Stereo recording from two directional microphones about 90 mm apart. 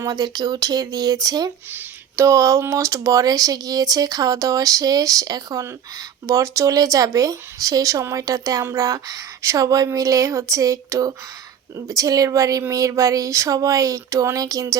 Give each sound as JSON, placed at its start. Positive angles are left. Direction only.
{"t": 0.0, "sound": "speech", "side_deg": -45}
{"t": 2.1, "sound": "speech", "side_deg": -35}